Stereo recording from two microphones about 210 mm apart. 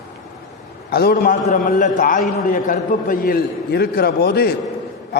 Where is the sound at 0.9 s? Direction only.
50° left (ahead or behind).